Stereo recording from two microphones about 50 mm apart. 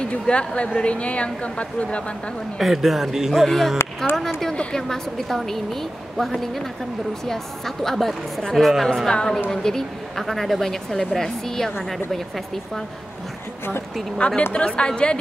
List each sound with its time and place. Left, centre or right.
0.0 s a woman's voice: left
2.6 s speech: centre
3.4 s a woman's voice: centre
4.8 s a woman's voice: centre
14.1 s speech: centre